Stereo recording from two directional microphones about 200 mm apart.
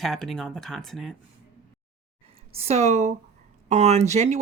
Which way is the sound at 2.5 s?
30° right (ahead or behind).